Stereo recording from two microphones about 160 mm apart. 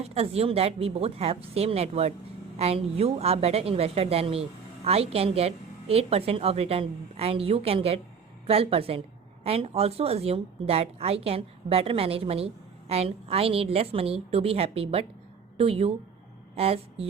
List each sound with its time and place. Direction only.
0.0 s a woman's voice: 40° right (ahead or behind)